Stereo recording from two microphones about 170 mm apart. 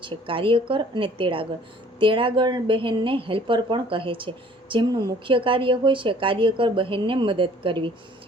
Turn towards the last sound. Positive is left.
turn(degrees=-30)  # may be behind; listen again after turning